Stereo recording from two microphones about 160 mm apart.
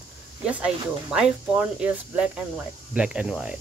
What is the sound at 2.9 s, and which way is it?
Speech, 5° right (ahead or behind).